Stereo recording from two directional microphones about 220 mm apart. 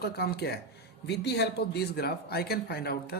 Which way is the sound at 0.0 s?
45° left (ahead or behind).